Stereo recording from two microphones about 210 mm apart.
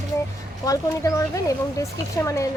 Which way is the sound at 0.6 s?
15° left (ahead or behind).